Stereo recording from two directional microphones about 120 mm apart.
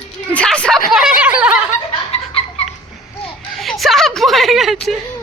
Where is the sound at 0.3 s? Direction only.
10° left (ahead or behind); by 1.5 s 10° right (ahead or behind).